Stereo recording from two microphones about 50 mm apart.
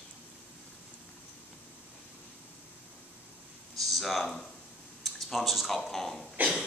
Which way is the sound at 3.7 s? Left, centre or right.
Centre.